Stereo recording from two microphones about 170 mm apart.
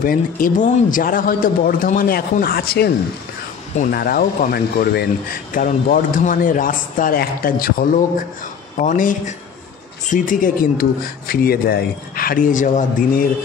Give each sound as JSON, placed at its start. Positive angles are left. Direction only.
{"t": 0.0, "sound": "speech", "side_deg": 55}
{"t": 3.9, "sound": "speech", "side_deg": 65}
{"t": 8.7, "sound": "speech", "side_deg": 50}